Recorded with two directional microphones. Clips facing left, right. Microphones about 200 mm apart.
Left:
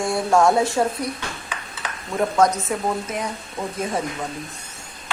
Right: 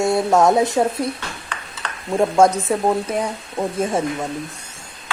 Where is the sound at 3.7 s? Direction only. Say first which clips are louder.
Right 4 dB; 30° right (ahead or behind).